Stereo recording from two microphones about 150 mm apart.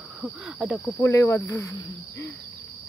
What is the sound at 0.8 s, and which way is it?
Speech, 15° left (ahead or behind).